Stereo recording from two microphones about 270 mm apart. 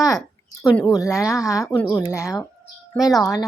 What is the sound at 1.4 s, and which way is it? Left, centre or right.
Speech, centre.